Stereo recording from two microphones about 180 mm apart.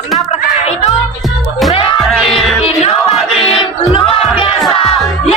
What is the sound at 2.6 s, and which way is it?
Music, 35° left (ahead or behind).